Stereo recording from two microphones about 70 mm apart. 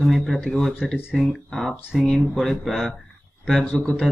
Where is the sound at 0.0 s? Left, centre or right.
Centre.